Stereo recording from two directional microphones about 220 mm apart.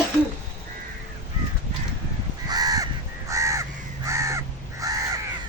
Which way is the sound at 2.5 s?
15° right (ahead or behind).